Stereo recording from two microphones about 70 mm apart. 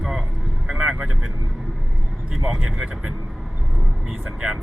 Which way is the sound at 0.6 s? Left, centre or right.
Centre.